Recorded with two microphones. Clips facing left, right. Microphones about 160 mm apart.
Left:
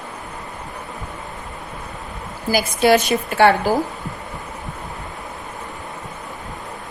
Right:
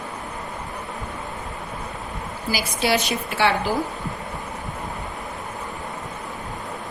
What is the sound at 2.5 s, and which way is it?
A woman's voice, 50° left (ahead or behind).